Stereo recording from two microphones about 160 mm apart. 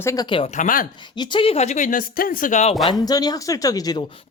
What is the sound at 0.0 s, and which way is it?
Speech, 20° left (ahead or behind).